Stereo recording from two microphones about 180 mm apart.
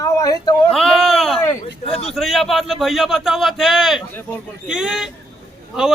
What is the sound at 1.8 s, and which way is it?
Speech, 30° left (ahead or behind).